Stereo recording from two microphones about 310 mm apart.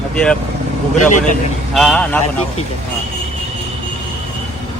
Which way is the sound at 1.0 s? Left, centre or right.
Left.